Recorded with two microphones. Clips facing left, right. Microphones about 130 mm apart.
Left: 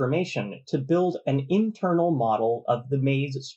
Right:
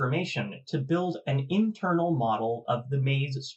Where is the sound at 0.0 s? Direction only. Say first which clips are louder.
Left 5 dB; 35° left (ahead or behind).